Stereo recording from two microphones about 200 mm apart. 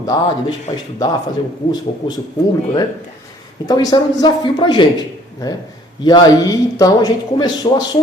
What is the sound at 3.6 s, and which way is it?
Speech, 20° left (ahead or behind).